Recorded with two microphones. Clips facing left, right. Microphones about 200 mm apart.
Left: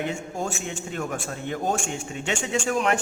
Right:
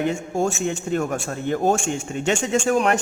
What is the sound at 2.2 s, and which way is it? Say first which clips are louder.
Speech: right 6 dB; 45° right (ahead or behind).